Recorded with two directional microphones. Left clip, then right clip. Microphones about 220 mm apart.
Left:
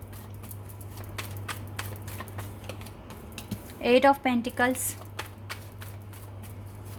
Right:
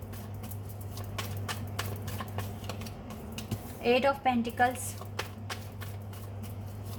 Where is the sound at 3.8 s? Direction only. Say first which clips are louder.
Left 5 dB; 50° left (ahead or behind).